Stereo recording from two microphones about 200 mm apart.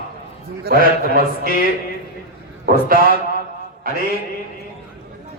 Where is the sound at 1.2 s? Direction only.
45° left (ahead or behind).